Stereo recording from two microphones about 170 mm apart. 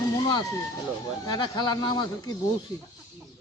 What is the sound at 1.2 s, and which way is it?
Speech, 25° left (ahead or behind).